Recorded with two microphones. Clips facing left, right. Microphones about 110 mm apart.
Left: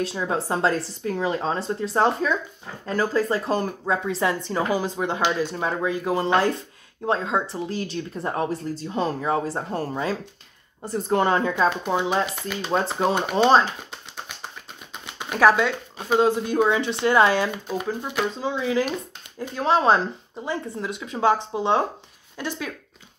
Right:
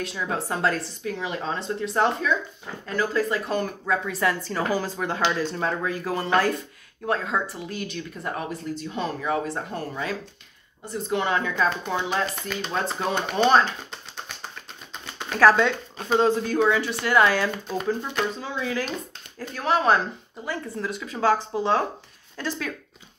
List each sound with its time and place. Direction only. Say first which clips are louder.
0.0 s speech: left 3 dB; 30° left (ahead or behind)
10.9 s speech: left 4 dB; 40° left (ahead or behind)
12.3 s speech: left 4 dB; 10° left (ahead or behind)
15.0 s speech: even; 15° left (ahead or behind)
18.4 s speech: left 5 dB; 20° left (ahead or behind)